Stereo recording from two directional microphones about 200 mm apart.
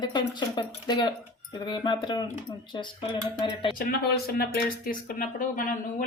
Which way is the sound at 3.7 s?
50° left (ahead or behind).